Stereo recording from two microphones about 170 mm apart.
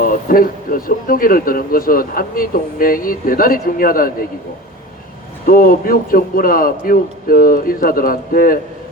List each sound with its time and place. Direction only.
0.0 s speech: 55° left (ahead or behind)
5.5 s speech: 60° left (ahead or behind)